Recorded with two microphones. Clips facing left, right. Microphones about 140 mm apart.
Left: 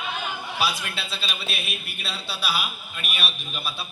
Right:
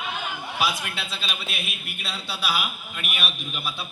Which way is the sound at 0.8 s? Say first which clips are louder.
Even; 20° right (ahead or behind).